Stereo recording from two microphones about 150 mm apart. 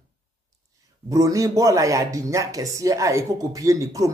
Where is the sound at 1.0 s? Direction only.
25° right (ahead or behind).